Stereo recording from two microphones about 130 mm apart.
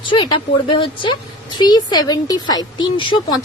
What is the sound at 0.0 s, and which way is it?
A woman's voice, 35° left (ahead or behind).